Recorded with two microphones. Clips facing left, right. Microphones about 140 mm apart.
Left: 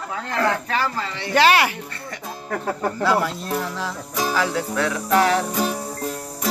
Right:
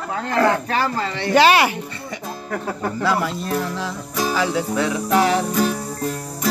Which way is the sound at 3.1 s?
Centre (ahead or behind).